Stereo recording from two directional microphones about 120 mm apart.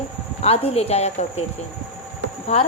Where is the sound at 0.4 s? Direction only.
60° left (ahead or behind).